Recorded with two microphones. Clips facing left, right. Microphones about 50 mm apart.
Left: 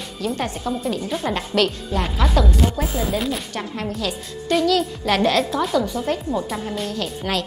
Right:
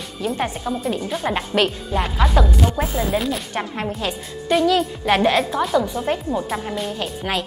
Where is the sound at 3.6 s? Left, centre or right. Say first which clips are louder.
Right 2 dB; right.